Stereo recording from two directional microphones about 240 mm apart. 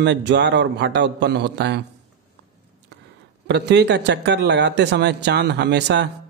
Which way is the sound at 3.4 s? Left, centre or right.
Right.